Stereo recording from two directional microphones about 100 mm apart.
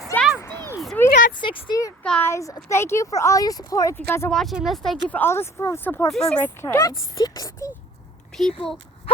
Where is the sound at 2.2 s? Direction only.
30° left (ahead or behind).